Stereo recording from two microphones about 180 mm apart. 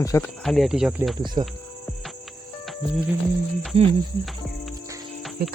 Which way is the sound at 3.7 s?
30° right (ahead or behind).